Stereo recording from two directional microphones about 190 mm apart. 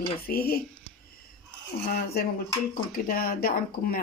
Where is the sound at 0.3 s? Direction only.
50° left (ahead or behind).